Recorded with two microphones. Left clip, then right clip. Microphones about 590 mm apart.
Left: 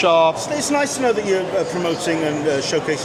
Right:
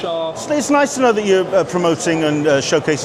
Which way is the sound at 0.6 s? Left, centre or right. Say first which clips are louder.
Right 5 dB; right.